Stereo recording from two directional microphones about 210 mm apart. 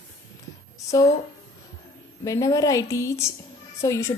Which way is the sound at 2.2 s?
15° left (ahead or behind).